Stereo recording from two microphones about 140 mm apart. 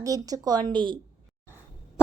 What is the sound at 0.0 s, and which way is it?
Speech, 25° right (ahead or behind).